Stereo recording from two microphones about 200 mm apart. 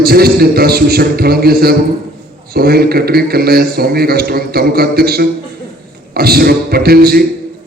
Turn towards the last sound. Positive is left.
turn(degrees=-50)  # may be behind; listen again after turning